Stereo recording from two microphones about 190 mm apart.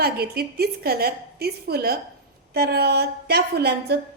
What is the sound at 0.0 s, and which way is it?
A woman's voice, 55° right (ahead or behind).